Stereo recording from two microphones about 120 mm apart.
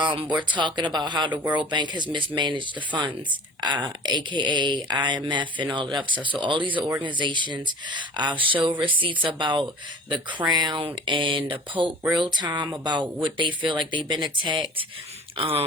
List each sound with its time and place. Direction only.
0.0 s speech: 40° right (ahead or behind)